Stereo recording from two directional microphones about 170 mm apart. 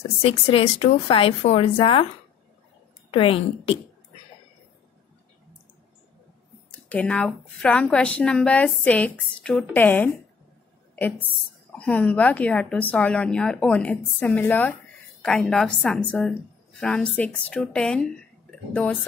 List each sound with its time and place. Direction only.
0.2 s a woman's voice: 35° left (ahead or behind)
3.1 s a woman's voice: 30° left (ahead or behind)
6.9 s a woman's voice: 5° left (ahead or behind)
11.8 s a woman's voice: 10° left (ahead or behind)